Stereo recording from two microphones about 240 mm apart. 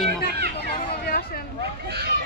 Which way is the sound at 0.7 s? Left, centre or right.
Left.